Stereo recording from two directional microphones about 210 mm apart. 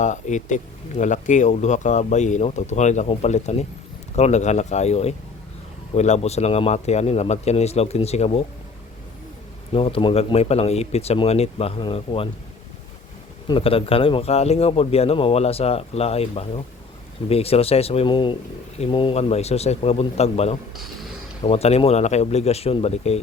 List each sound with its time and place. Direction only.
0.0 s speech: 35° left (ahead or behind)
9.7 s speech: 25° left (ahead or behind)
13.5 s speech: 25° left (ahead or behind)